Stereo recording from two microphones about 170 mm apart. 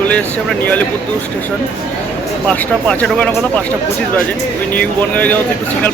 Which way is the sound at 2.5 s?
5° left (ahead or behind).